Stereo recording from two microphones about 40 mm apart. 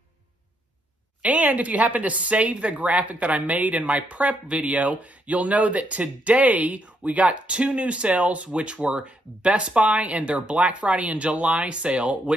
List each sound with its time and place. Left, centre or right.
1.2 s speech: right